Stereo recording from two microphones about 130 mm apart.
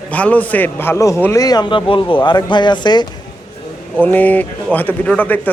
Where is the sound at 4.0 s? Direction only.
15° left (ahead or behind).